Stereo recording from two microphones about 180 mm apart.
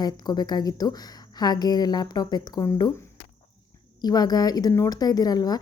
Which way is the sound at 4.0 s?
20° left (ahead or behind).